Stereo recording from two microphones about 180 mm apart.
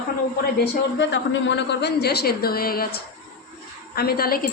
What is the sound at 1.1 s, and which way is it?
A woman's voice, 85° left.